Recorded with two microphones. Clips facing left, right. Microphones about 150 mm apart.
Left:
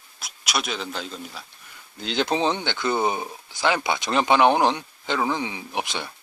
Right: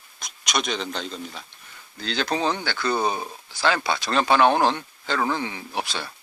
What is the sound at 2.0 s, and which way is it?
A man's voice, 20° left (ahead or behind).